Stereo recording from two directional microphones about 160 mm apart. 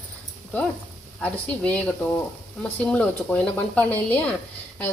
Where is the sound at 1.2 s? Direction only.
10° left (ahead or behind).